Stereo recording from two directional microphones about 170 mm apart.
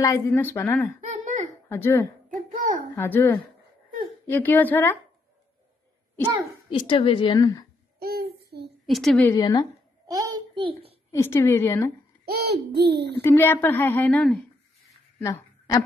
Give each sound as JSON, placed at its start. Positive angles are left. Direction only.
{"t": 0.0, "sound": "a woman's voice", "side_deg": 15}
{"t": 1.0, "sound": "a sound", "side_deg": -45}
{"t": 1.7, "sound": "a woman's voice", "side_deg": 15}
{"t": 6.7, "sound": "a woman's voice", "side_deg": 30}
{"t": 8.0, "sound": "child singing", "side_deg": -65}
{"t": 8.8, "sound": "a woman's voice", "side_deg": 0}
{"t": 9.3, "sound": "a woman's voice", "side_deg": 20}
{"t": 10.0, "sound": "a sound", "side_deg": -20}
{"t": 11.1, "sound": "a woman's voice", "side_deg": 15}
{"t": 12.3, "sound": "a child's voice", "side_deg": -70}
{"t": 13.2, "sound": "a woman's voice", "side_deg": 15}
{"t": 15.1, "sound": "a sound", "side_deg": 15}